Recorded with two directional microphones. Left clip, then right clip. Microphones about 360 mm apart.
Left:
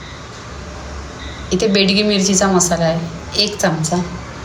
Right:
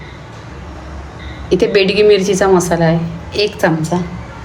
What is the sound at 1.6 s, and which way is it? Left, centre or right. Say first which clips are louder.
A woman's voice: right 3 dB; centre.